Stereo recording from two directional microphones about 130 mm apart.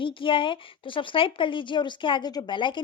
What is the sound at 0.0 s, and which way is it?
Speech, 40° left (ahead or behind).